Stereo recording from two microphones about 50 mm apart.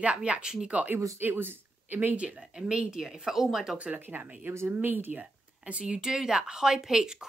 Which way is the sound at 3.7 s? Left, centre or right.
Right.